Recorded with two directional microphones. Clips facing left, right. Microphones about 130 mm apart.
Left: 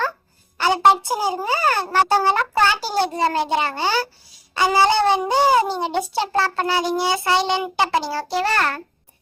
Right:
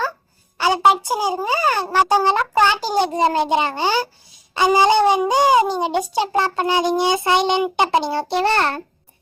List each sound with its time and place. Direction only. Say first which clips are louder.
0.6 s a child's voice: even; 10° right (ahead or behind)